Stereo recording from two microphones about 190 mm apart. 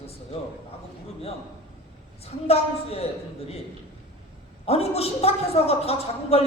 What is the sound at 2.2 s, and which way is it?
Speech, 30° left (ahead or behind).